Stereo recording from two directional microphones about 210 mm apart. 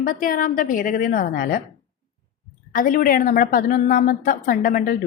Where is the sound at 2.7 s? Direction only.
40° left (ahead or behind).